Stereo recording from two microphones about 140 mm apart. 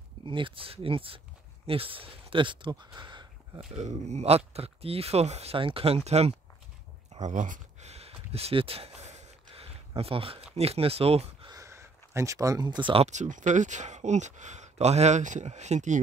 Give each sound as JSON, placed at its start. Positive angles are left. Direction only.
{"t": 0.2, "sound": "speech", "side_deg": -35}
{"t": 3.7, "sound": "speech", "side_deg": -50}
{"t": 7.2, "sound": "speech", "side_deg": -60}
{"t": 7.9, "sound": "a sound", "side_deg": -45}
{"t": 10.5, "sound": "speech", "side_deg": -45}
{"t": 11.4, "sound": "a sound", "side_deg": -25}
{"t": 13.0, "sound": "speech", "side_deg": -60}